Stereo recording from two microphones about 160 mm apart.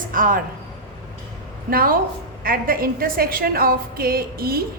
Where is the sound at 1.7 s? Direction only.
65° right (ahead or behind).